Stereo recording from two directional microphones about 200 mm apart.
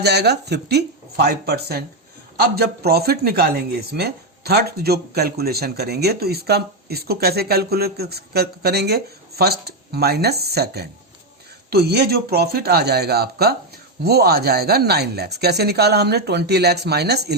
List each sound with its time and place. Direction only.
0.0 s speech: 55° right (ahead or behind)